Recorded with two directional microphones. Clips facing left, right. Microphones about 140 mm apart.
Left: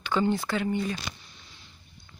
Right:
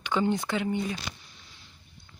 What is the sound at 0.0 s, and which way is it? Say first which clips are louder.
Speech: left 1 dB; 15° right (ahead or behind).